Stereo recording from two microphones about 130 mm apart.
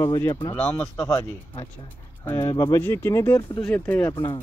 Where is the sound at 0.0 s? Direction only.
25° left (ahead or behind).